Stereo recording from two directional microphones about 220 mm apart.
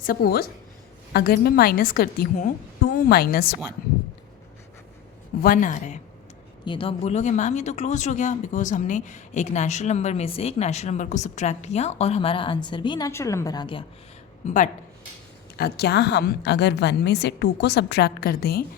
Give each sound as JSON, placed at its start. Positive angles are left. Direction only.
{"t": 0.0, "sound": "a woman's voice", "side_deg": 45}
{"t": 5.4, "sound": "speech", "side_deg": 40}
{"t": 14.4, "sound": "speech", "side_deg": 35}
{"t": 15.5, "sound": "a woman's voice", "side_deg": 45}